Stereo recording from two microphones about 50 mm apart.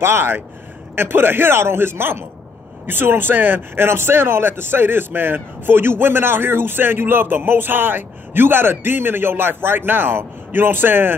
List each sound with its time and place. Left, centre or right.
0.0 s speech: right